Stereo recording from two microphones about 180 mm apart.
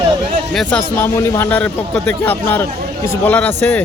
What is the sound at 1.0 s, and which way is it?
A man's voice, 15° left (ahead or behind).